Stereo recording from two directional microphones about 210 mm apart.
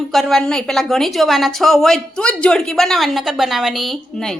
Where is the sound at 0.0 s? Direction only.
Centre (ahead or behind).